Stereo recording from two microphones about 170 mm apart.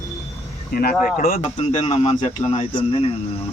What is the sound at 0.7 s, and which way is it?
Speech, 60° left (ahead or behind).